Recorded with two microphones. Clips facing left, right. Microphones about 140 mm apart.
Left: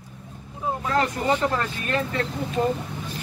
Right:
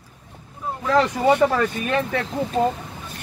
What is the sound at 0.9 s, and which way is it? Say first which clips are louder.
Speech: right 6 dB; 90° right.